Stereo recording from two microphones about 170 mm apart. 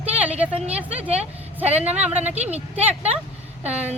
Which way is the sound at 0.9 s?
40° right (ahead or behind).